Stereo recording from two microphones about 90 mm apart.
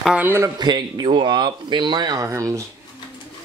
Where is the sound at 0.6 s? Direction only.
50° right (ahead or behind).